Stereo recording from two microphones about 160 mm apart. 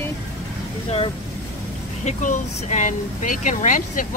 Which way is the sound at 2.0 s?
50° left (ahead or behind).